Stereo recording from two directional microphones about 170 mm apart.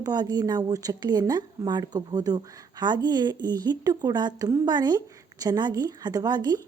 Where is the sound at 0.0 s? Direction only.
25° right (ahead or behind).